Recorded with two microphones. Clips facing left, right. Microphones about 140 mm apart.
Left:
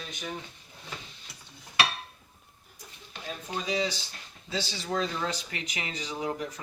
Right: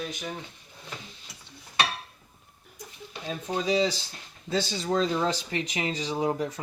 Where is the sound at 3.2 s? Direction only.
25° right (ahead or behind).